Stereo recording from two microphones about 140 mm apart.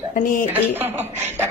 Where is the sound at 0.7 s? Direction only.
15° right (ahead or behind).